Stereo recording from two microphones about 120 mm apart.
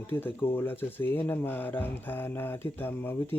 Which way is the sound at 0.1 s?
15° left (ahead or behind).